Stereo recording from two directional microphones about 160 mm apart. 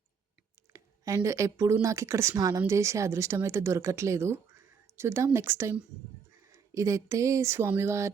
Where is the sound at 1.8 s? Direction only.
20° right (ahead or behind).